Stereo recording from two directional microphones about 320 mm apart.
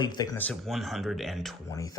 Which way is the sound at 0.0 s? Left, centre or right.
Centre.